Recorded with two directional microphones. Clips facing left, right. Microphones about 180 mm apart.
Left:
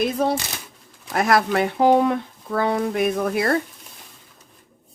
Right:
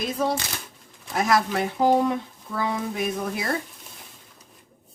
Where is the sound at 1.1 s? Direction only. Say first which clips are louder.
Left 3 dB; 60° left (ahead or behind).